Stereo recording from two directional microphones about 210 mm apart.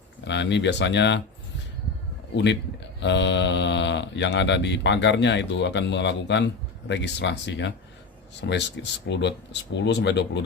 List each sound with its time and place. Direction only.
0.3 s speech: 55° left (ahead or behind)
2.3 s speech: 55° left (ahead or behind)